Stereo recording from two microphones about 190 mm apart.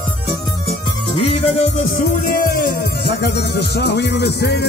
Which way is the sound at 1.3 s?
40° left (ahead or behind).